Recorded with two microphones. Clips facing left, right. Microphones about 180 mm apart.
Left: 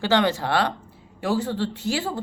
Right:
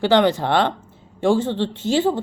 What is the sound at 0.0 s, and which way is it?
Speech, 15° right (ahead or behind).